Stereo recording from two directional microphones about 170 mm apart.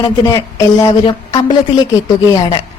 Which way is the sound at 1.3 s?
25° left (ahead or behind).